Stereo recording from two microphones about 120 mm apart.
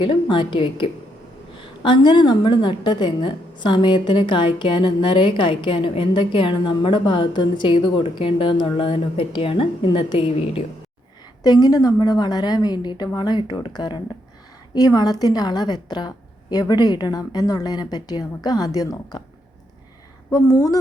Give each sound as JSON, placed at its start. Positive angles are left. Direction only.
{"t": 0.0, "sound": "a woman's voice", "side_deg": 45}
{"t": 11.4, "sound": "a woman's voice", "side_deg": 30}
{"t": 20.3, "sound": "speech", "side_deg": 30}